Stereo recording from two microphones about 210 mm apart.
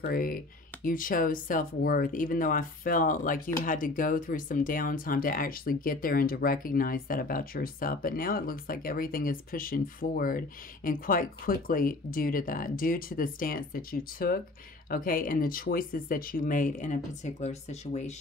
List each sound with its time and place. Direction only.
0.0 s speech: 45° left (ahead or behind)